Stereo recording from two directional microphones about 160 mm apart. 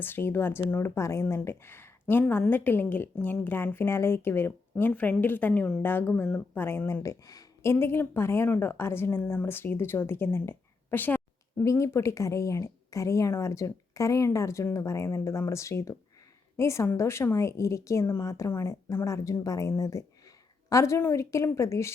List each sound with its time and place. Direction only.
0.0 s speech: 15° left (ahead or behind)